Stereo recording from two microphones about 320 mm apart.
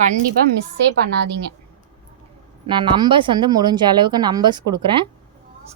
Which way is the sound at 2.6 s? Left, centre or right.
Centre.